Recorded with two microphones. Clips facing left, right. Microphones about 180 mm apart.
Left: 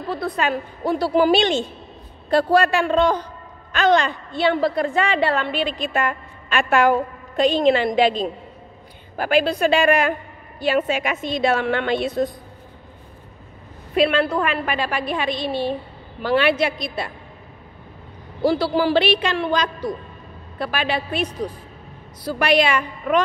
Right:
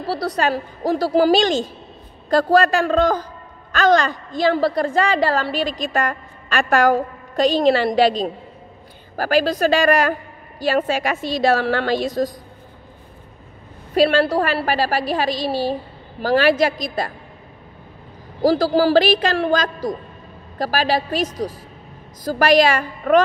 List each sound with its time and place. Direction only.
0.0 s a woman's voice: 90° right
0.4 s a woman's voice: 35° right (ahead or behind)
2.8 s a woman's voice: 40° right (ahead or behind)
9.1 s a woman's voice: 40° right (ahead or behind)
13.9 s a woman's voice: 35° right (ahead or behind)
18.4 s a woman's voice: 40° right (ahead or behind)